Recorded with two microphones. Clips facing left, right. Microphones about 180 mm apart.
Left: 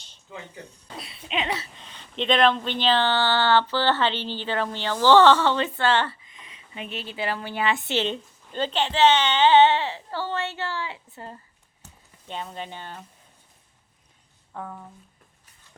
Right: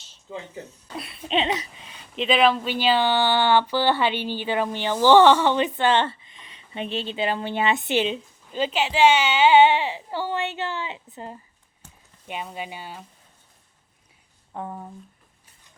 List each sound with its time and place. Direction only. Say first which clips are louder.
0.9 s laughter: right 5 dB; 55° right (ahead or behind)
1.5 s speech: right 3 dB; 15° right (ahead or behind)
8.0 s speech: right 1 dB; 5° right (ahead or behind)
14.5 s speech: right 3 dB; 25° right (ahead or behind)